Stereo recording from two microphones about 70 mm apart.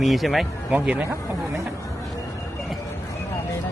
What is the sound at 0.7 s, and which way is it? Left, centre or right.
Speech, right.